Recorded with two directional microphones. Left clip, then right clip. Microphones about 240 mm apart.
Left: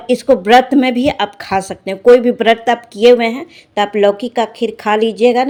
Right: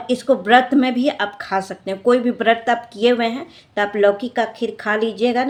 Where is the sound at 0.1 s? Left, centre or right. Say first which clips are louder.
Left 5 dB; left.